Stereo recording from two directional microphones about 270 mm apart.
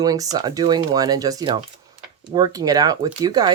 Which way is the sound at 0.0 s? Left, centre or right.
Centre.